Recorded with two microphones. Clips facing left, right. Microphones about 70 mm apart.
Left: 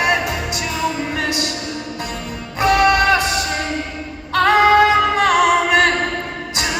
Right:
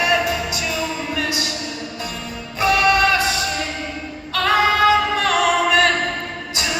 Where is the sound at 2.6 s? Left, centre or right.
Left.